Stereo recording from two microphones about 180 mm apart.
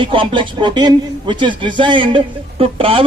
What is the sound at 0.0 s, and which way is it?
A man's voice, 30° right (ahead or behind).